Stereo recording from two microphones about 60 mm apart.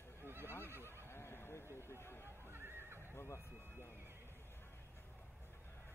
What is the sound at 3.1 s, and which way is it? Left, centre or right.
Neigh, left.